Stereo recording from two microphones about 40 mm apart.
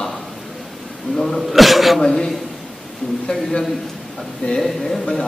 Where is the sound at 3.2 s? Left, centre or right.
Centre.